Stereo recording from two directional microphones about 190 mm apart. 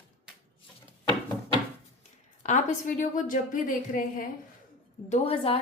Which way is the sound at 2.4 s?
40° left (ahead or behind).